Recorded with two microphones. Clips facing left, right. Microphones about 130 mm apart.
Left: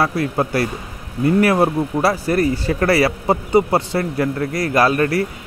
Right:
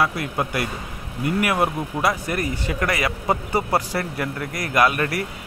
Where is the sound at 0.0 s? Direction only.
30° left (ahead or behind).